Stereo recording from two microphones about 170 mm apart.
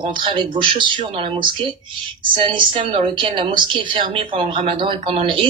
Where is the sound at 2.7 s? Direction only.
30° right (ahead or behind).